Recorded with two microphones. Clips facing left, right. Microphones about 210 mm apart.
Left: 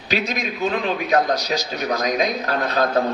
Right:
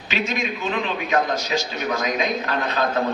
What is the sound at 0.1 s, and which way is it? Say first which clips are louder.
A man's voice: left 1 dB; 40° left (ahead or behind).